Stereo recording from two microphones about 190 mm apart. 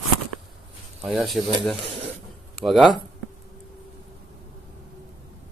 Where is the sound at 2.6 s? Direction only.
Centre (ahead or behind).